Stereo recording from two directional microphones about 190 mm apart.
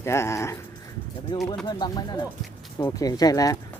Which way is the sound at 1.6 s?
20° left (ahead or behind).